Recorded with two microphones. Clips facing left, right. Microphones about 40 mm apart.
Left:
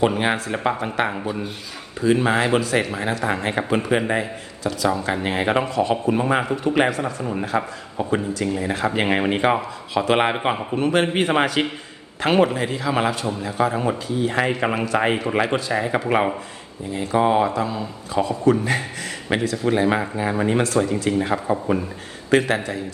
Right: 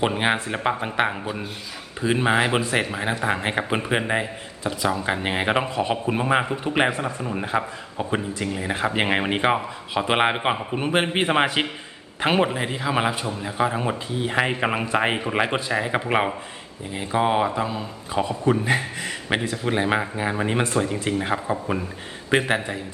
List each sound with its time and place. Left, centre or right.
0.0 s speech: centre
2.0 s a man's voice: centre
7.4 s a man's voice: centre
20.7 s speech: centre
22.3 s a man's voice: centre